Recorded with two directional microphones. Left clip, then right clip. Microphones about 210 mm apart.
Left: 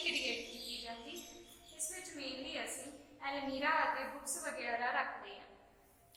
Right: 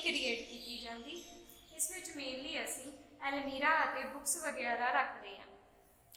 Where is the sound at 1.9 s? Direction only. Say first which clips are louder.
Even; 30° right (ahead or behind).